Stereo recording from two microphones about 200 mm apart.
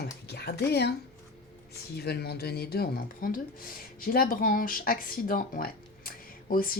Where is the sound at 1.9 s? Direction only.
50° left (ahead or behind).